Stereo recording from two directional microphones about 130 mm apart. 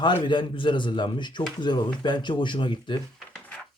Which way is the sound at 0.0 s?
40° left (ahead or behind).